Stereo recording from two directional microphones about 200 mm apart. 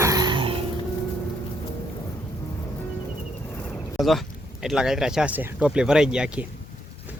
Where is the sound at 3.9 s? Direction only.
Centre (ahead or behind).